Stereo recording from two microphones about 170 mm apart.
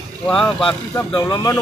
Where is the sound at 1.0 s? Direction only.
20° left (ahead or behind).